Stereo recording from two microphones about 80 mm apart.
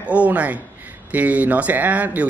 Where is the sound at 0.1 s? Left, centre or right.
Centre.